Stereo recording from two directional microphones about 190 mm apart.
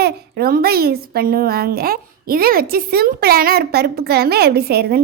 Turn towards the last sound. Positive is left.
turn(degrees=-55)  # may be behind; listen again after turning